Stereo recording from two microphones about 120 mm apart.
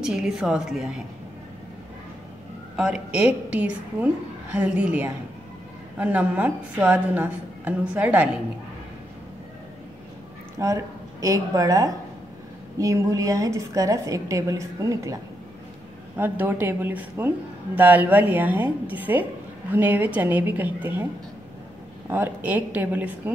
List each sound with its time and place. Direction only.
0.0 s a woman's voice: 5° right (ahead or behind)
2.7 s a woman's voice: 5° right (ahead or behind)
10.6 s a woman's voice: 25° right (ahead or behind)
16.2 s a woman's voice: 15° right (ahead or behind)
22.1 s a woman's voice: 15° right (ahead or behind)